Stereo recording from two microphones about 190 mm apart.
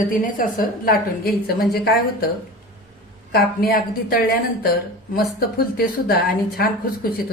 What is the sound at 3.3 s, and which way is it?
A woman's voice, 55° left (ahead or behind).